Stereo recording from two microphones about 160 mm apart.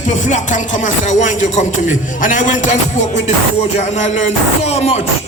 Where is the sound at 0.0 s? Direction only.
50° left (ahead or behind).